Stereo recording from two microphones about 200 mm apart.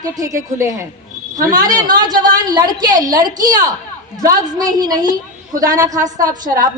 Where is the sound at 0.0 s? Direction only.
15° right (ahead or behind).